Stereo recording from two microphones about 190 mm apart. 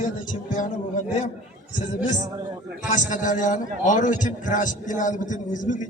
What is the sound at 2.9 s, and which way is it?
A man's voice, 40° left (ahead or behind).